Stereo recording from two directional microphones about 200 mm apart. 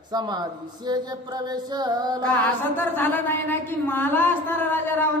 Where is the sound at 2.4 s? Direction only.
10° left (ahead or behind).